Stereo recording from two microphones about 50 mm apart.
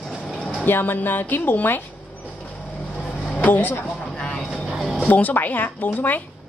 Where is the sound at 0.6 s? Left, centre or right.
Left.